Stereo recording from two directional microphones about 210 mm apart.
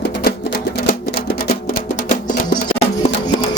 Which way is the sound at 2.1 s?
40° left (ahead or behind).